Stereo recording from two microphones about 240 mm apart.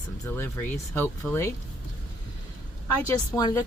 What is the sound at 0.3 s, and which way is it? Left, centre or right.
Speech, centre.